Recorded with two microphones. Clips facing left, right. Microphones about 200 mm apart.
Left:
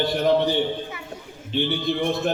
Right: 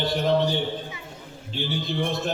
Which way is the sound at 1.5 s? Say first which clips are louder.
Left 6 dB; 60° left (ahead or behind).